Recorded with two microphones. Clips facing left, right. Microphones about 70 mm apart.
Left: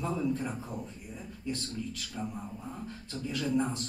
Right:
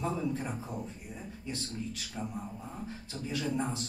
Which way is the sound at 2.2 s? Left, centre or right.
Centre.